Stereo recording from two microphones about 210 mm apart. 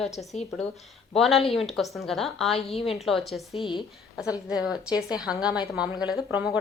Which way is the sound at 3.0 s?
Centre (ahead or behind).